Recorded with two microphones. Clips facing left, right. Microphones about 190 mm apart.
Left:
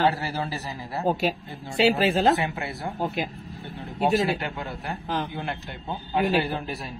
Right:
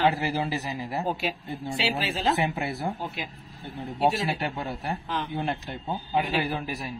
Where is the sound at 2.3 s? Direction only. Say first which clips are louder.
Even; 15° right (ahead or behind).